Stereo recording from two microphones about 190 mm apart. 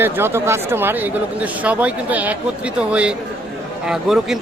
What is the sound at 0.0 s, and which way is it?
Speech, 10° right (ahead or behind).